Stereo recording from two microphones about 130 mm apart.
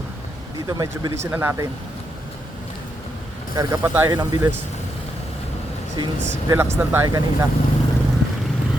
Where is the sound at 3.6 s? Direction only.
20° right (ahead or behind).